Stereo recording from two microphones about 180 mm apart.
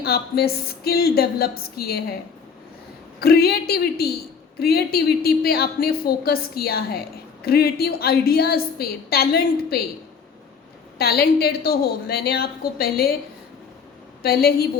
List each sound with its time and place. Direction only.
0.0 s a woman's voice: 60° left (ahead or behind)
3.2 s a woman's voice: 60° left (ahead or behind)
10.9 s a woman's voice: 60° left (ahead or behind)
14.2 s a woman's voice: 60° left (ahead or behind)